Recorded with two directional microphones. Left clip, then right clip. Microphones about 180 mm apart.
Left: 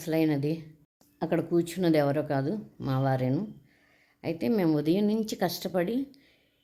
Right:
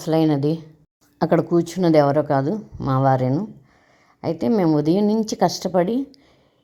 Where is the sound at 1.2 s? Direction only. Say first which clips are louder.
Right 9 dB; 25° right (ahead or behind).